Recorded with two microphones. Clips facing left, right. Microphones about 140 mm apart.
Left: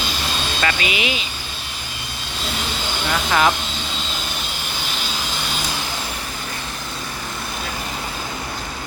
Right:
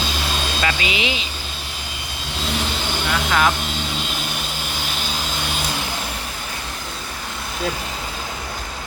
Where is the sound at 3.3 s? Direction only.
5° left (ahead or behind).